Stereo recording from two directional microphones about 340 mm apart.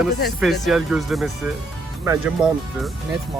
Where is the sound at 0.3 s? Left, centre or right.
Centre.